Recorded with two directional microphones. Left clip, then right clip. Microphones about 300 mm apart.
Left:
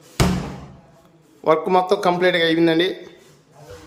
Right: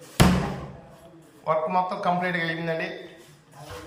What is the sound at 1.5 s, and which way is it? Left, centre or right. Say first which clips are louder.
A man's voice: left 7 dB; left.